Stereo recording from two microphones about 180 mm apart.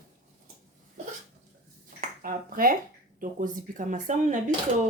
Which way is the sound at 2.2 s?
55° right (ahead or behind).